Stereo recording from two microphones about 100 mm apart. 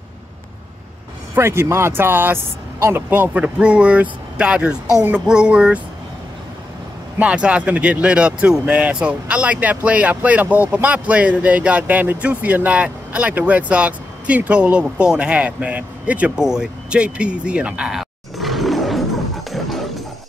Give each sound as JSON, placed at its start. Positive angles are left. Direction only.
{"t": 1.3, "sound": "speech", "side_deg": -25}
{"t": 7.2, "sound": "speech", "side_deg": -10}
{"t": 19.5, "sound": "music", "side_deg": 0}